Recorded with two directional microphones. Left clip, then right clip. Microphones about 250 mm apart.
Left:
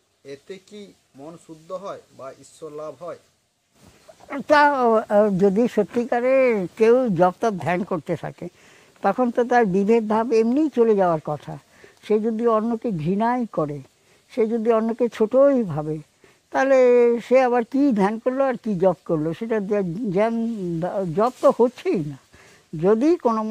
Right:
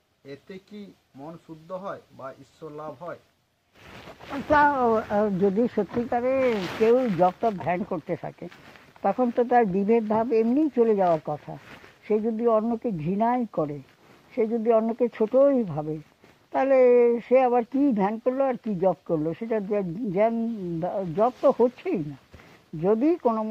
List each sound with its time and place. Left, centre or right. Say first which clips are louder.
0.3 s speech: left 4 dB; centre
4.3 s speech: left 4 dB; left